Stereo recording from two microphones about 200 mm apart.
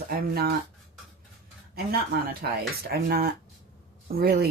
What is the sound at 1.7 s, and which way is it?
Speech, 50° right (ahead or behind).